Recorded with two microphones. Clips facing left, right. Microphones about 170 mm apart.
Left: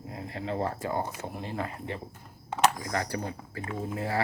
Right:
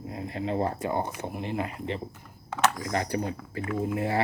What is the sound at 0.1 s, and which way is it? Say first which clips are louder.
Speech: right 3 dB; 20° right (ahead or behind).